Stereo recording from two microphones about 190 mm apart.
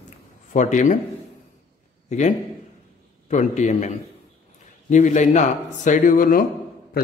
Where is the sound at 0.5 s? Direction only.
40° left (ahead or behind).